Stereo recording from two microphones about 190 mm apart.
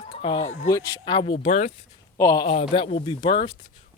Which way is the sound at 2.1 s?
15° left (ahead or behind).